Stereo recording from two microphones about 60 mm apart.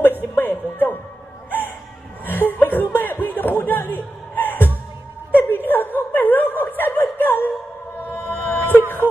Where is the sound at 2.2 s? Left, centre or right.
Left.